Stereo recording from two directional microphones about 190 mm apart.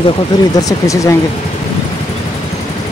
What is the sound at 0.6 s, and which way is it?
Speech, 20° left (ahead or behind).